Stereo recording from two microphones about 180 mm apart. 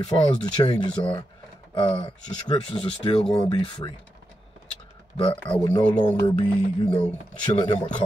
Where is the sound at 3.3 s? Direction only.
30° left (ahead or behind).